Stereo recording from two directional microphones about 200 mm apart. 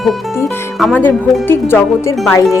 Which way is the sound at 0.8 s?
10° left (ahead or behind).